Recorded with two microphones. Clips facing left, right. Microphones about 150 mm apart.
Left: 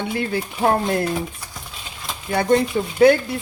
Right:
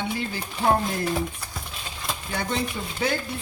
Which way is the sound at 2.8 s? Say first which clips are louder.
Left 11 dB; 90° left.